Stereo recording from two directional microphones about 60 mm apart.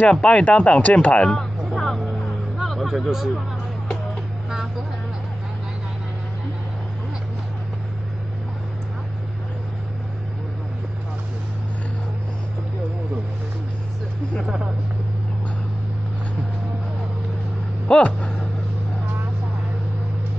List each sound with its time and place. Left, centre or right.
0.1 s speech: centre
1.7 s vehicle: centre
2.0 s music: centre
14.4 s speech: centre
17.8 s speech: centre